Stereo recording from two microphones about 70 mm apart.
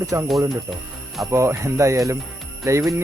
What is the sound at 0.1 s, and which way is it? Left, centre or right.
Speech, right.